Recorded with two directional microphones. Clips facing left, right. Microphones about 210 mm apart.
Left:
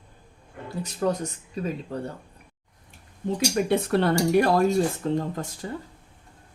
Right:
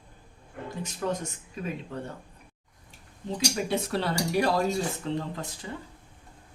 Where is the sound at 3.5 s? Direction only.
55° left (ahead or behind).